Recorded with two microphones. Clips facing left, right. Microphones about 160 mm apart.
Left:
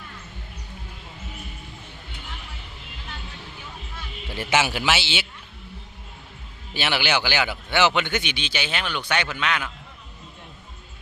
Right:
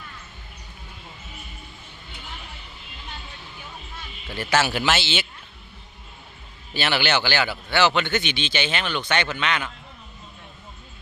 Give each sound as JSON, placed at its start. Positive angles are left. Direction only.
{"t": 4.3, "sound": "a man's voice", "side_deg": 25}
{"t": 4.5, "sound": "speech", "side_deg": 10}
{"t": 6.7, "sound": "speech", "side_deg": 10}